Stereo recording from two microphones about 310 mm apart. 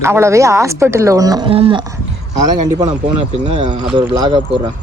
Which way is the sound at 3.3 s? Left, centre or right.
Right.